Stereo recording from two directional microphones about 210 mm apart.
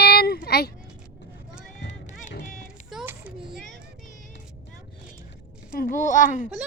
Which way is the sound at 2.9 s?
5° right (ahead or behind).